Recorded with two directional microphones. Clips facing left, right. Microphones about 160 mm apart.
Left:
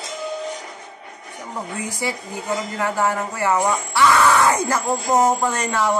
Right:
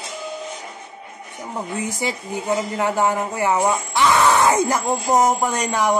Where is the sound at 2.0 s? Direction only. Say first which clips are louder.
Right 1 dB; 20° right (ahead or behind).